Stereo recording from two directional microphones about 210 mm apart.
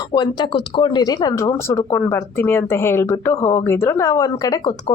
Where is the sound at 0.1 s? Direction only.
20° left (ahead or behind).